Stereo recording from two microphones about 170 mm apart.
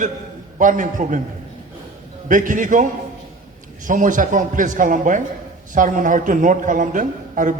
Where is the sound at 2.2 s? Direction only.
50° right (ahead or behind).